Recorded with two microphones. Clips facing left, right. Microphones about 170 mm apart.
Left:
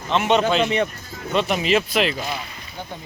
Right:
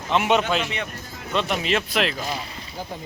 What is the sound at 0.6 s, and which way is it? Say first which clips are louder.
Speech: left 9 dB; 35° left (ahead or behind).